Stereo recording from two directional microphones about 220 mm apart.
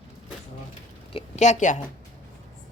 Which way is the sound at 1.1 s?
30° left (ahead or behind).